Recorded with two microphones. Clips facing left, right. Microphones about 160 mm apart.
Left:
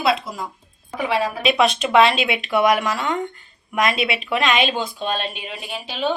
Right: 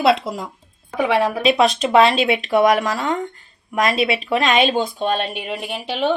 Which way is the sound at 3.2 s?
40° right (ahead or behind).